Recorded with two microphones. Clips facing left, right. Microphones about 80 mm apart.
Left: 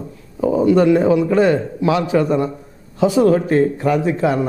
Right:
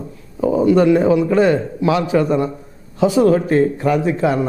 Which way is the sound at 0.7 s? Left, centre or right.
Right.